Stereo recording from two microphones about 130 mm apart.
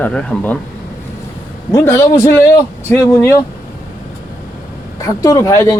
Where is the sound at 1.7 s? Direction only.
20° left (ahead or behind).